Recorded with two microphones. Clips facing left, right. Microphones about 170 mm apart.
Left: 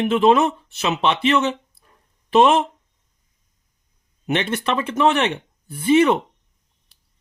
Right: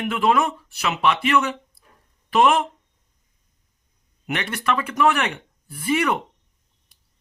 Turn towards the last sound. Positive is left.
turn(degrees=25)  # may be behind; listen again after turning